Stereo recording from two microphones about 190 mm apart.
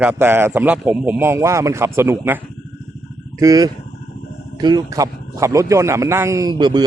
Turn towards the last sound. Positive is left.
turn(degrees=-20)  # may be behind; listen again after turning